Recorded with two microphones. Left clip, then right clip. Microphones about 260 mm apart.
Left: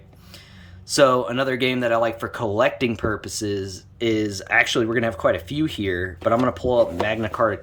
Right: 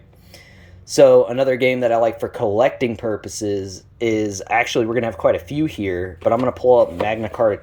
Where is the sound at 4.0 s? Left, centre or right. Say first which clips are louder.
Right 3 dB; left.